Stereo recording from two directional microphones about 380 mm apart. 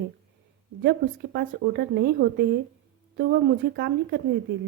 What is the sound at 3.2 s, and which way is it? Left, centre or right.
A woman's voice, right.